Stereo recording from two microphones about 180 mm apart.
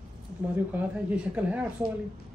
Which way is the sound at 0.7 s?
5° right (ahead or behind).